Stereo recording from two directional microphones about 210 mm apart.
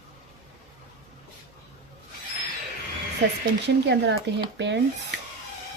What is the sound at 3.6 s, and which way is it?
Speech, 55° right (ahead or behind).